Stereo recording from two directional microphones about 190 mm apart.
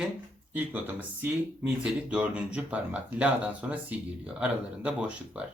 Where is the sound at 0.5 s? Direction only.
10° right (ahead or behind).